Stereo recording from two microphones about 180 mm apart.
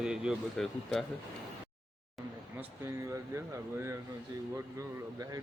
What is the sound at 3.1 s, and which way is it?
Speech, 15° right (ahead or behind).